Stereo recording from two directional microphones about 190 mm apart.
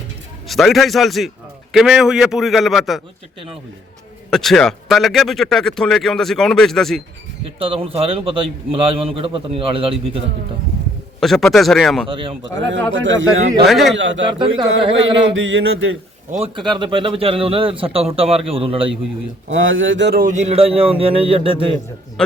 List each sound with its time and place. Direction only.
0.4 s speech: centre (ahead or behind)
4.3 s speech: centre (ahead or behind)
7.6 s speech: 30° right (ahead or behind)
11.2 s speech: centre (ahead or behind)
12.0 s speech: 30° right (ahead or behind)
12.5 s a man's voice: 75° right (ahead or behind)
13.7 s speech: centre (ahead or behind)
13.9 s a man's voice: 75° right (ahead or behind)
14.3 s speech: 25° right (ahead or behind)
14.9 s a sound: 85° right
16.3 s speech: 30° right (ahead or behind)
19.5 s a man's voice: 90° right; by 20.2 s 65° right (ahead or behind)
20.2 s speech: 35° right (ahead or behind)